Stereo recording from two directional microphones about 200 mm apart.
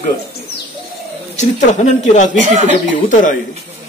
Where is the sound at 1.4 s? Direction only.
35° left (ahead or behind).